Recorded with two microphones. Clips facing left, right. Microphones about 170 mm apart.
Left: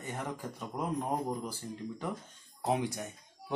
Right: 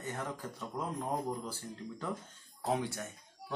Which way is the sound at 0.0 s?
15° left (ahead or behind).